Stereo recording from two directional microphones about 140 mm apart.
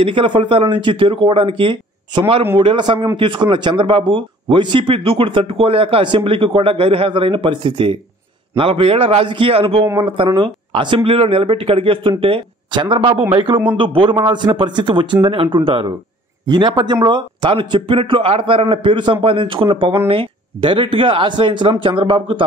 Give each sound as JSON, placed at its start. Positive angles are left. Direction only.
{"t": 0.0, "sound": "speech", "side_deg": -40}